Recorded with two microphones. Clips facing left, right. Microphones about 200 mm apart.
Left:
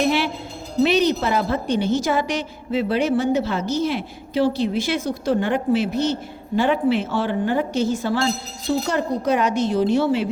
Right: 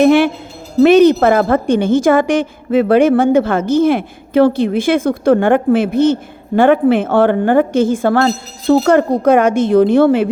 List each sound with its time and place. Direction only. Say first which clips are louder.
0.0 s a woman's voice: right 11 dB; 50° right (ahead or behind)